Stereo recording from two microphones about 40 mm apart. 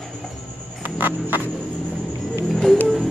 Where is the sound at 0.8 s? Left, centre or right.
Right.